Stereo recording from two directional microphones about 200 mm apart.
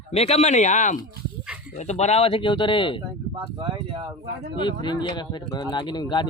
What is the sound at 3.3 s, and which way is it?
Speech, 25° right (ahead or behind).